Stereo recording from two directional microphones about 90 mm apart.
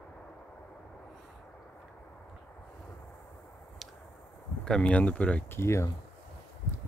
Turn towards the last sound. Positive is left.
turn(degrees=30)  # may be behind; listen again after turning